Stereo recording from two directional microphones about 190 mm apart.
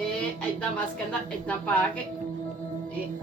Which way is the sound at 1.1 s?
5° left (ahead or behind).